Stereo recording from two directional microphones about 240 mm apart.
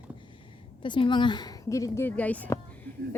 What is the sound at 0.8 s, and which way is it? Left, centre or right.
Speech, centre.